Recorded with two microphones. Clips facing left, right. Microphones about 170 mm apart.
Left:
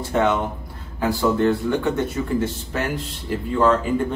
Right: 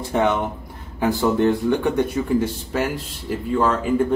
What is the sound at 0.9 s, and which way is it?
Speech, 15° right (ahead or behind).